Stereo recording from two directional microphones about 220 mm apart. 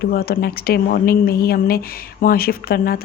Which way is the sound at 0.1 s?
45° left (ahead or behind).